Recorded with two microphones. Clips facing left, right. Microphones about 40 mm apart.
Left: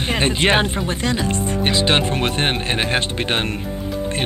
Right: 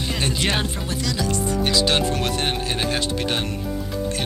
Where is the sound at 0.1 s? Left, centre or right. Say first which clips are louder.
Left 7 dB; left.